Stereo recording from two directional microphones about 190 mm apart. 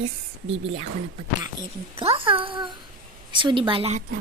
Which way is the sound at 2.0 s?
30° right (ahead or behind).